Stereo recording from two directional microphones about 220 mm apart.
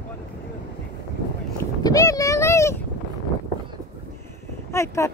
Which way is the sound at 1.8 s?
15° left (ahead or behind).